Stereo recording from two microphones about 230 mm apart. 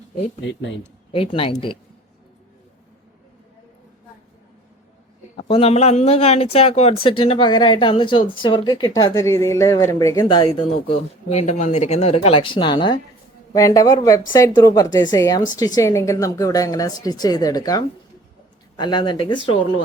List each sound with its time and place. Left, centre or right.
0.4 s speech: left
1.1 s speech: left
5.4 s a woman's voice: left